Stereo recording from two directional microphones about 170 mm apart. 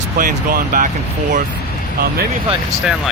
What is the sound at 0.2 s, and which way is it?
Speech, 55° right (ahead or behind).